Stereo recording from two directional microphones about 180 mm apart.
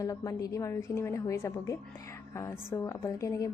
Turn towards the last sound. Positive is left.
turn(degrees=15)  # may be behind; listen again after turning